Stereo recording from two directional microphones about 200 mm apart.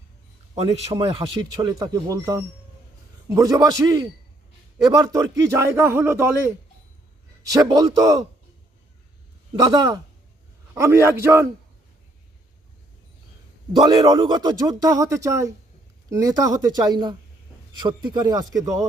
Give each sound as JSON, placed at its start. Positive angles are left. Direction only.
{"t": 0.5, "sound": "speech", "side_deg": -30}
{"t": 1.6, "sound": "speech", "side_deg": -20}
{"t": 7.5, "sound": "speech", "side_deg": -20}
{"t": 9.5, "sound": "speech", "side_deg": -20}
{"t": 13.7, "sound": "speech", "side_deg": -25}